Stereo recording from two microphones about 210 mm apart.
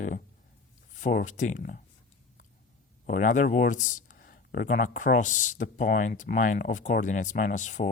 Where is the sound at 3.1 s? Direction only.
40° left (ahead or behind).